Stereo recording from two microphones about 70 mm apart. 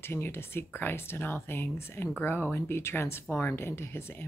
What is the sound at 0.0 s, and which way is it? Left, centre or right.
A woman's voice, left.